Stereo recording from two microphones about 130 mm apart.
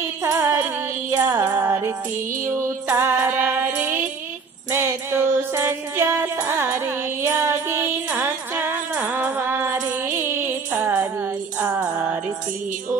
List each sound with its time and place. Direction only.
0.2 s child singing: 20° right (ahead or behind)
1.1 s music: 15° right (ahead or behind)